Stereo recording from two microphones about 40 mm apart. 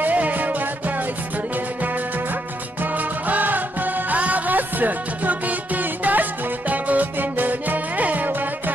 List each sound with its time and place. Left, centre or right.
0.0 s music: right
2.8 s music: right